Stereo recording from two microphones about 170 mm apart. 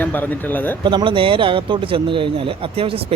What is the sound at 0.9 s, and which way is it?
Speech, 30° right (ahead or behind).